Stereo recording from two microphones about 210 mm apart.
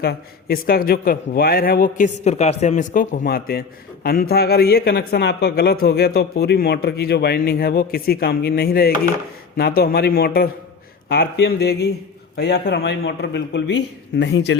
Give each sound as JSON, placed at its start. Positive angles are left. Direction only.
{"t": 0.0, "sound": "a man's voice", "side_deg": 45}